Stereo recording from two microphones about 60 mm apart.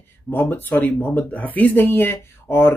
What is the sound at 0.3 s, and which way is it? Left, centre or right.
Speech, left.